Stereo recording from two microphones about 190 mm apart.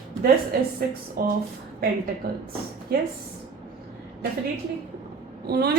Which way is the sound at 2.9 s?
55° right (ahead or behind).